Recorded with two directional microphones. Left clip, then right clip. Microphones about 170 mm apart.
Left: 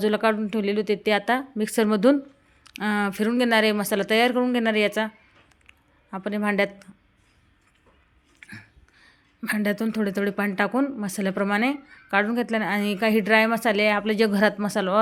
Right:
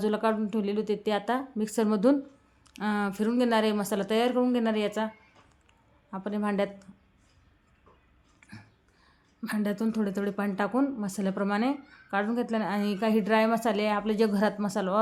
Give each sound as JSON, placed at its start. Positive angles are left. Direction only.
{"t": 0.0, "sound": "a woman's voice", "side_deg": 15}
{"t": 5.6, "sound": "a sound", "side_deg": 15}
{"t": 9.4, "sound": "a woman's voice", "side_deg": 15}